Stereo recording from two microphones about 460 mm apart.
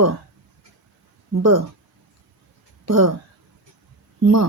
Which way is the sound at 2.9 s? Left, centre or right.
Right.